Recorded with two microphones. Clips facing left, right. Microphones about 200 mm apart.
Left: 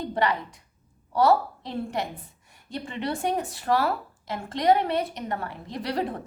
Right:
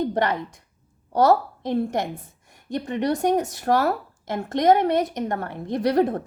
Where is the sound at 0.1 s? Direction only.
45° right (ahead or behind).